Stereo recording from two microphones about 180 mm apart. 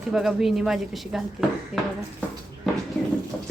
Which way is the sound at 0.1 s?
5° right (ahead or behind).